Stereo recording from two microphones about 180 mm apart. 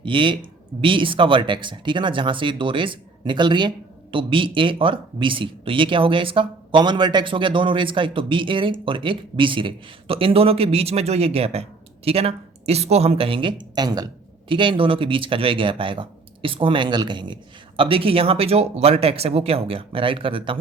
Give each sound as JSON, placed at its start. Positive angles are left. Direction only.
{"t": 0.0, "sound": "speech", "side_deg": -25}